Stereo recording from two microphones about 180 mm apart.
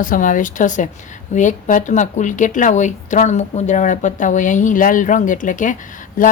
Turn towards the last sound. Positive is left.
turn(degrees=50)  # may be behind; listen again after turning